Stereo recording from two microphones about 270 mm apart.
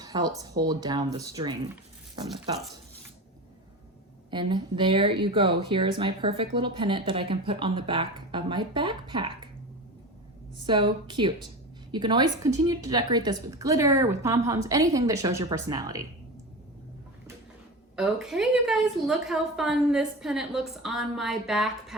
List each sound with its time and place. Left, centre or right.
0.0 s a woman's voice: centre
4.3 s speech: centre
10.6 s a woman's voice: centre
17.9 s a woman's voice: centre